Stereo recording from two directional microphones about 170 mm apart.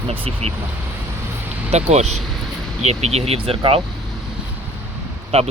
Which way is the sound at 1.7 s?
40° right (ahead or behind).